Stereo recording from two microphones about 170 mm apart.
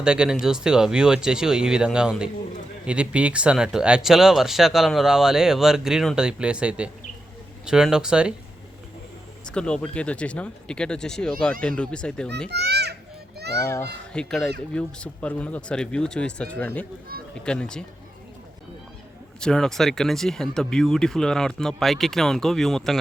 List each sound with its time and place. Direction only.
0.0 s speech: 5° right (ahead or behind)
9.5 s speech: 5° left (ahead or behind)
12.5 s children playing: 75° right (ahead or behind)
13.7 s speech: 10° left (ahead or behind)
19.4 s speech: 5° left (ahead or behind)